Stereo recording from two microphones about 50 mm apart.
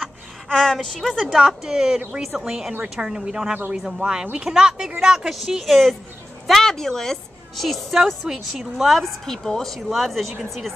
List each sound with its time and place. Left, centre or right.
0.0 s a sound: centre
1.0 s a woman's voice: centre
8.3 s speech: centre
8.9 s a woman's voice: centre